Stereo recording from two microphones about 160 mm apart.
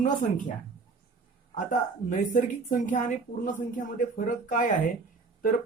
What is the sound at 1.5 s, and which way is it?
A man's voice, 55° left (ahead or behind).